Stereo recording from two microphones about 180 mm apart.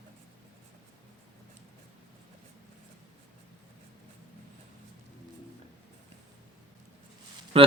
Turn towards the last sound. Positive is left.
turn(degrees=-35)  # may be behind; listen again after turning